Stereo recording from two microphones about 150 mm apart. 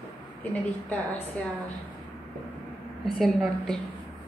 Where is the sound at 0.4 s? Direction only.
10° left (ahead or behind).